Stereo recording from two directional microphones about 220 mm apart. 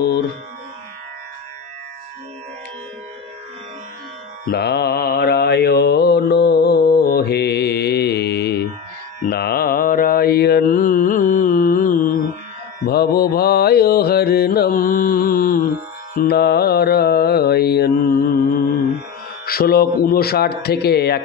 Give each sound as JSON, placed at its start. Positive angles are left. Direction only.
{"t": 4.5, "sound": "speech", "side_deg": 45}
{"t": 6.0, "sound": "mantra", "side_deg": 45}
{"t": 19.4, "sound": "speech", "side_deg": 45}